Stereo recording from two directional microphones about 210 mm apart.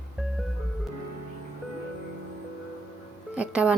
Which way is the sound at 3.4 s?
5° right (ahead or behind).